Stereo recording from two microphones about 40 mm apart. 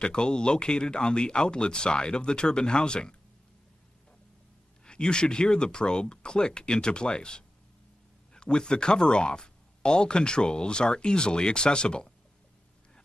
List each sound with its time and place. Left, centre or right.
0.0 s speech: left
4.8 s speech: left